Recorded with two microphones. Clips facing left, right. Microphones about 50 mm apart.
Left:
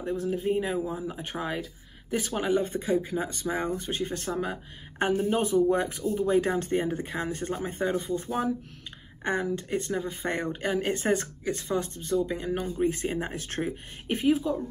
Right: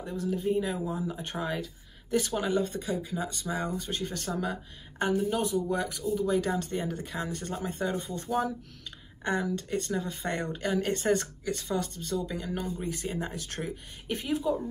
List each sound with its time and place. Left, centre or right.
0.2 s speech: left